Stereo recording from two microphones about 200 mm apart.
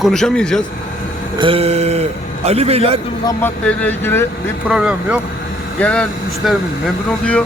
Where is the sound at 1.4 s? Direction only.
25° right (ahead or behind).